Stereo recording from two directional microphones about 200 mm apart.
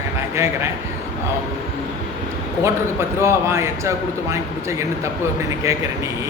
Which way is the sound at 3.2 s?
15° right (ahead or behind).